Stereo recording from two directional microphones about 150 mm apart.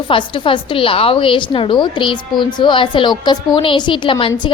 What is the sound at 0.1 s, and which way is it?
A woman's voice, 35° left (ahead or behind).